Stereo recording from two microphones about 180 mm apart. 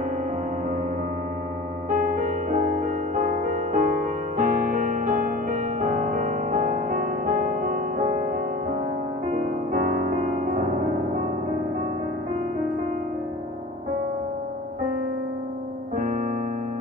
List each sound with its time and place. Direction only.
1.9 s music: 50° right (ahead or behind)